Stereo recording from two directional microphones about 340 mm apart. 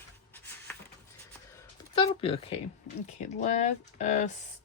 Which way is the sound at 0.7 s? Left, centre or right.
Centre.